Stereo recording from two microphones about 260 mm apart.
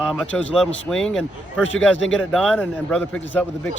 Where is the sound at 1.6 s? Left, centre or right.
Left.